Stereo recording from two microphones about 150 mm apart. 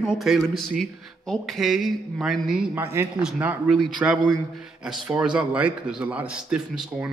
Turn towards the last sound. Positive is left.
turn(degrees=-5)  # may be behind; listen again after turning